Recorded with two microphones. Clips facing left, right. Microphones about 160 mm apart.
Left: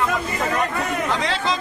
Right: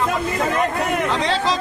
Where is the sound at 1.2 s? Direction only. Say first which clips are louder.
Right 3 dB; 35° right (ahead or behind).